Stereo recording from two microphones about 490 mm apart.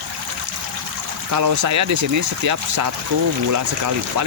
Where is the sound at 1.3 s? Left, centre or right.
Right.